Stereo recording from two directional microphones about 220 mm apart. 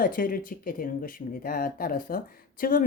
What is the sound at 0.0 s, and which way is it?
Speech, 40° left (ahead or behind).